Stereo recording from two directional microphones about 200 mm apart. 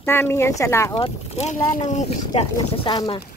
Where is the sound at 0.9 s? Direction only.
30° left (ahead or behind).